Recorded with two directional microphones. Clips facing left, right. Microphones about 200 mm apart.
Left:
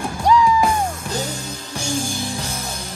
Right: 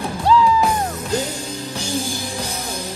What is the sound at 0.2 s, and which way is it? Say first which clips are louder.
Music: even; 15° left (ahead or behind).